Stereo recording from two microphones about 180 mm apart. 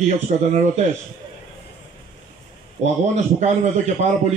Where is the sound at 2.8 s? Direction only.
40° right (ahead or behind).